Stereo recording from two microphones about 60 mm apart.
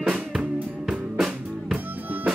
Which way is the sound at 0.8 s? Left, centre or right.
Centre.